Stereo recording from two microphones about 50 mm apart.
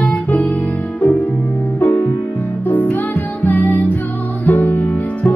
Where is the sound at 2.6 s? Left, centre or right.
Left.